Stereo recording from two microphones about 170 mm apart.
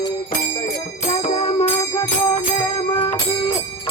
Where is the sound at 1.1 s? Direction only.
45° left (ahead or behind).